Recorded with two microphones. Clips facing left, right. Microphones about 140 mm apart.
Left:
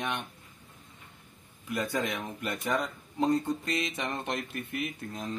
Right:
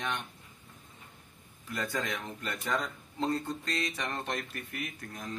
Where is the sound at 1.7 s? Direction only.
15° left (ahead or behind).